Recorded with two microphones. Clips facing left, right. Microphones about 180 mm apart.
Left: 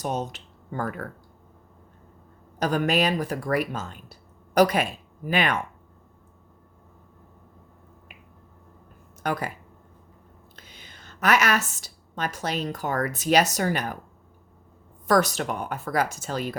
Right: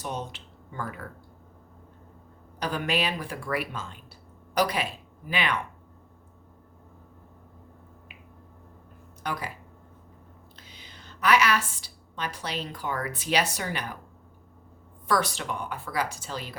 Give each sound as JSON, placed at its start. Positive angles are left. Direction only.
{"t": 0.0, "sound": "speech", "side_deg": 45}
{"t": 2.6, "sound": "speech", "side_deg": 45}
{"t": 9.2, "sound": "speech", "side_deg": 50}
{"t": 10.7, "sound": "a woman's voice", "side_deg": 50}
{"t": 15.0, "sound": "speech", "side_deg": 45}